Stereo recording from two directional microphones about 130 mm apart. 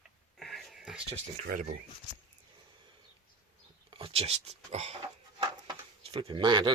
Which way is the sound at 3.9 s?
45° right (ahead or behind).